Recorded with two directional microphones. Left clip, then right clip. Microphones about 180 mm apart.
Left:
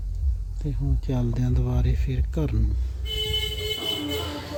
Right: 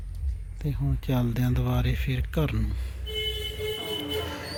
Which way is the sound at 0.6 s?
10° right (ahead or behind).